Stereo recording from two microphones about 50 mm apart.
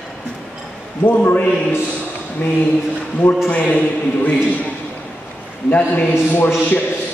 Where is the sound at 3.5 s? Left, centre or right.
Left.